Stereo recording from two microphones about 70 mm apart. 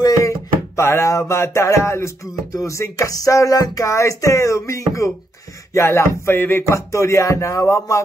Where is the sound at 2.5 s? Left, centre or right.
Left.